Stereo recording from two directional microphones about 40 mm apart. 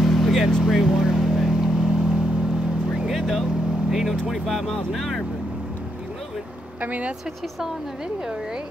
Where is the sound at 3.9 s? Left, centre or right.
Centre.